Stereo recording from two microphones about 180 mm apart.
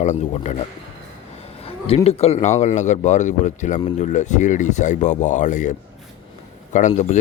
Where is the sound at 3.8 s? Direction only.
30° left (ahead or behind).